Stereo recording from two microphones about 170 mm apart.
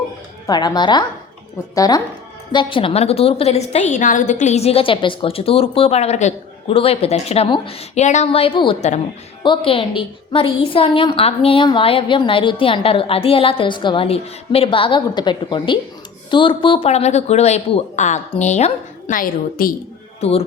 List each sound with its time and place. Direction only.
0.4 s a woman's voice: 25° left (ahead or behind)
3.9 s a woman's voice: 50° left (ahead or behind)
20.2 s a woman's voice: 40° left (ahead or behind)